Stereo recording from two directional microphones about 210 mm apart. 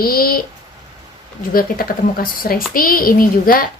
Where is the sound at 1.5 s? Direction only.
45° left (ahead or behind).